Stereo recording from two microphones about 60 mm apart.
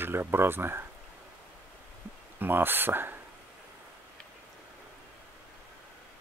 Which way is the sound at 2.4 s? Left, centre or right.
Right.